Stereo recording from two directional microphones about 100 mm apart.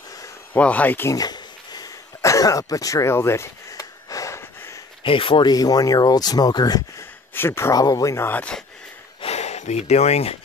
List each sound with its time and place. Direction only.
0.5 s speech: 15° left (ahead or behind)
1.1 s a sound: 45° left (ahead or behind); by 4.8 s 25° left (ahead or behind)
5.0 s speech: 60° left (ahead or behind)
5.5 s speech: 40° left (ahead or behind)
7.0 s speech: 25° left (ahead or behind)
7.7 s speech: 35° left (ahead or behind)
8.3 s speech: 15° left (ahead or behind)
9.2 s a sound: 90° left